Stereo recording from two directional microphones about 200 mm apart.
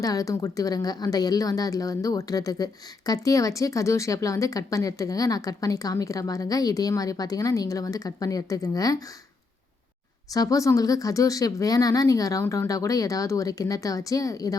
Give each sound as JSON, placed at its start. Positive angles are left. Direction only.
{"t": 0.0, "sound": "speech", "side_deg": 15}
{"t": 10.3, "sound": "speech", "side_deg": 15}